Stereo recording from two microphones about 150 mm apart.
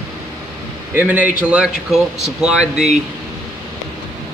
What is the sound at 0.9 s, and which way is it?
A man's voice, 10° right (ahead or behind).